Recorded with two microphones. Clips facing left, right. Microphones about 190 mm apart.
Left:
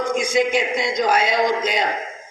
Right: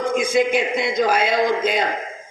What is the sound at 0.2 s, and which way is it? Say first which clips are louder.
A man's voice: right 1 dB; 55° right (ahead or behind).